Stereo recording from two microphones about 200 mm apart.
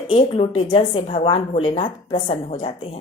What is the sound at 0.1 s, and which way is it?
A woman's voice, 30° left (ahead or behind).